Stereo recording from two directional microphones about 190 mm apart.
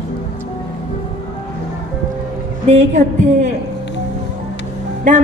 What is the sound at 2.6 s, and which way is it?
Speech, 35° right (ahead or behind).